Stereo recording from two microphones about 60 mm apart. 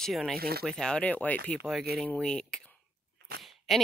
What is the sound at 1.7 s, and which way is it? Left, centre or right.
Speech, centre.